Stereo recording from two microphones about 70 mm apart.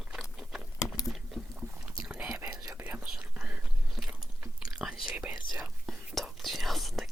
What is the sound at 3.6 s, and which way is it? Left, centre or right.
Biting, centre.